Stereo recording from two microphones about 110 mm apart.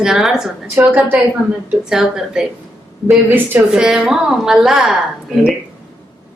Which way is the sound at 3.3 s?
20° right (ahead or behind).